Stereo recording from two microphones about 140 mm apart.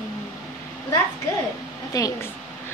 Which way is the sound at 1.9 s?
25° left (ahead or behind).